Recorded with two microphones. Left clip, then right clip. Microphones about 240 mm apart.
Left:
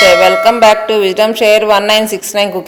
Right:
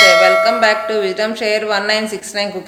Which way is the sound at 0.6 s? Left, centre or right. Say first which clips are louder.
Left 6 dB; left.